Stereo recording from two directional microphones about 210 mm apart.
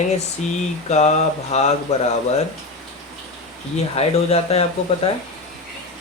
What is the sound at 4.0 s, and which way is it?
Speech, 30° left (ahead or behind).